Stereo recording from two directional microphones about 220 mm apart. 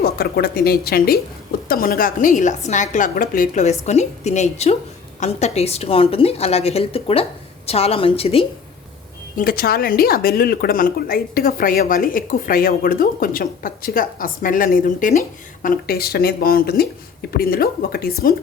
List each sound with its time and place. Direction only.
0.0 s a woman's voice: 45° left (ahead or behind); by 8.4 s 25° left (ahead or behind)
9.3 s speech: 40° left (ahead or behind)